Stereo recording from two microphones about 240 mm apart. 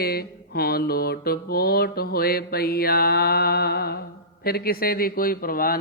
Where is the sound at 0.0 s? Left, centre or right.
Left.